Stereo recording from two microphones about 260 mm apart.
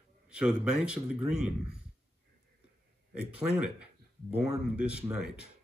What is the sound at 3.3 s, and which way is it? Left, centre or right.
Speech, centre.